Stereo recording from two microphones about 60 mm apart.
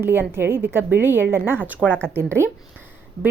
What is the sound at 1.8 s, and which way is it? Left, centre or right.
Speech, left.